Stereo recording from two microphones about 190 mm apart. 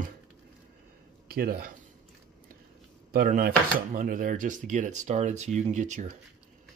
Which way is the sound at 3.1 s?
50° right (ahead or behind).